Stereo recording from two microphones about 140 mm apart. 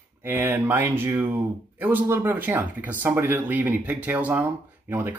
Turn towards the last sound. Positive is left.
turn(degrees=-15)  # may be behind; listen again after turning